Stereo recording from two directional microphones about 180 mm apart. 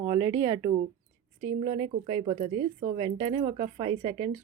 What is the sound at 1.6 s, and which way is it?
Speech, 30° right (ahead or behind).